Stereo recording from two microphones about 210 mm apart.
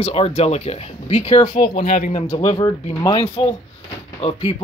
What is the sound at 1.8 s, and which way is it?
Speech, 40° left (ahead or behind).